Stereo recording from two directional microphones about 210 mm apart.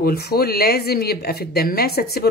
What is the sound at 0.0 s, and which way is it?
Speech, 50° left (ahead or behind).